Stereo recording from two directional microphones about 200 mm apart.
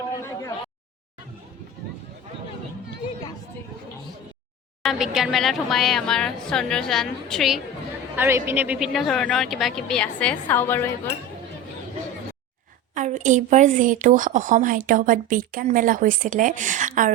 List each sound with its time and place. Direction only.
4.8 s speech: centre (ahead or behind)
8.1 s speech: 10° right (ahead or behind); by 10.8 s 10° left (ahead or behind)
12.9 s a woman's voice: 40° right (ahead or behind)